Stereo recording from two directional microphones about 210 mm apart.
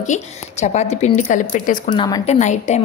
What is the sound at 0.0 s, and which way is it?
A woman's voice, 35° left (ahead or behind).